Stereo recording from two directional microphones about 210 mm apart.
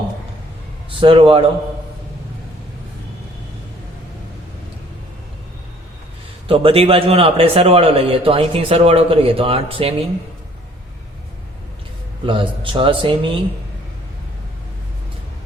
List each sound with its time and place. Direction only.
0.9 s a man's voice: 25° right (ahead or behind)
6.5 s a man's voice: 25° right (ahead or behind)
12.2 s a man's voice: 25° right (ahead or behind)